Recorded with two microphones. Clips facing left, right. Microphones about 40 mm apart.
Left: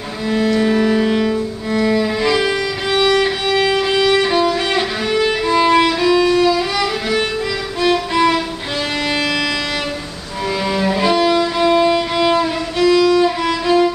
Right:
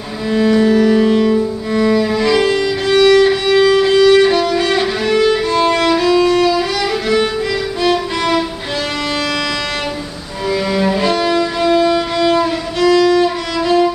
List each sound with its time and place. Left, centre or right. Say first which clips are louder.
0.6 s music: right 5 dB; centre
3.3 s music: right 5 dB; centre
3.9 s music: right 6 dB; centre
4.2 s music: right 3 dB; centre
5.2 s violin: even; centre
6.4 s music: right 1 dB; centre
10.8 s music: left 2 dB; centre
12.4 s music: right 1 dB; centre